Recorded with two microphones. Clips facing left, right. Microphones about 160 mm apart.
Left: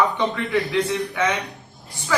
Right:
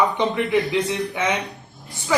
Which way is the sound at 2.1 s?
20° right (ahead or behind).